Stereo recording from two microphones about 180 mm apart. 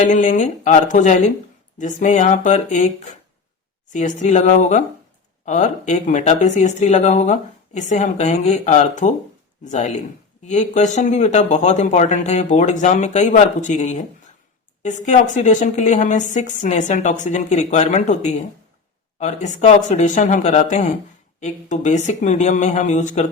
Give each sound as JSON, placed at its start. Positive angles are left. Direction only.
{"t": 0.0, "sound": "speech", "side_deg": 45}